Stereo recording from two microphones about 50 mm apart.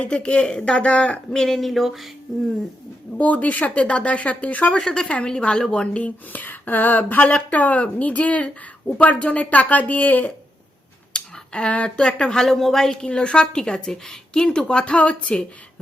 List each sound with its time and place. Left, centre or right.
0.0 s speech: left
1.3 s a woman's voice: centre
3.2 s a woman's voice: left
6.3 s speech: left
11.1 s speech: centre
12.4 s a woman's voice: centre; by 15.4 s left